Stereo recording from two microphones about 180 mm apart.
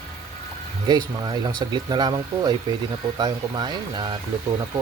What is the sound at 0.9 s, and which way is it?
Speech, 25° right (ahead or behind).